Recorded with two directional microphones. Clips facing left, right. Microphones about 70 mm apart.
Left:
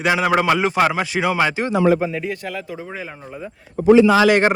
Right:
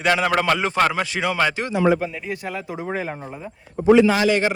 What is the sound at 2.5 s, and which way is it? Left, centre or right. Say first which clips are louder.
Speech: right 2 dB; right.